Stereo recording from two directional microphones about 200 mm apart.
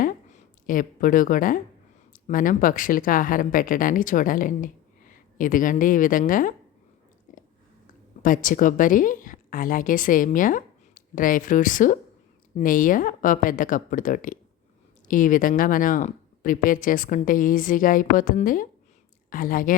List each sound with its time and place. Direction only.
0.0 s a sound: 40° left (ahead or behind)
2.1 s speech: 45° left (ahead or behind)
7.3 s chewing: 40° left (ahead or behind)
8.2 s a woman's voice: 40° left (ahead or behind)